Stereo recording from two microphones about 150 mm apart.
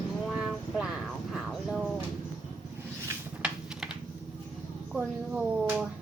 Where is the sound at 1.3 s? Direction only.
5° right (ahead or behind).